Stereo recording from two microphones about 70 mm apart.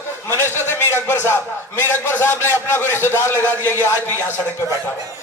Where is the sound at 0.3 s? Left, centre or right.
Left.